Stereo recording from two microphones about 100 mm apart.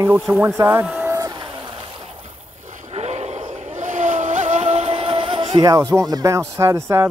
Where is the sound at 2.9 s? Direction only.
90° right.